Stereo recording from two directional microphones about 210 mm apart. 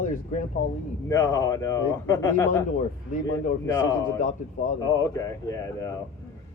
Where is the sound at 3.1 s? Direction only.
40° left (ahead or behind).